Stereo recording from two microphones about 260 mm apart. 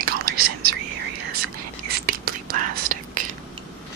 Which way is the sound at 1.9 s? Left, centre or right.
Right.